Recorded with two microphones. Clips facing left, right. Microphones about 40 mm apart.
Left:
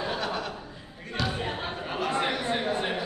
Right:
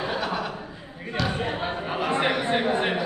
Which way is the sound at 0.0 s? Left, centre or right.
Centre.